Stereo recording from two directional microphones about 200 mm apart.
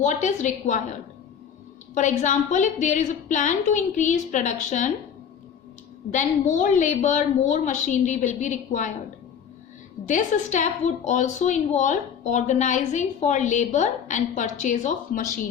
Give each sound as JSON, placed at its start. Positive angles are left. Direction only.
{"t": 0.0, "sound": "a woman's voice", "side_deg": 35}
{"t": 2.0, "sound": "a woman's voice", "side_deg": 35}
{"t": 6.1, "sound": "a woman's voice", "side_deg": 40}
{"t": 10.1, "sound": "a woman's voice", "side_deg": 40}